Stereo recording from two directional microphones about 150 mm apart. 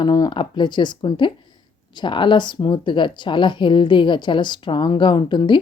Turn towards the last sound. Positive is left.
turn(degrees=30)  # may be behind; listen again after turning